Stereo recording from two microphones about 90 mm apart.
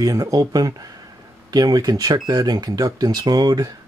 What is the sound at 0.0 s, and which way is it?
Speech, 40° right (ahead or behind).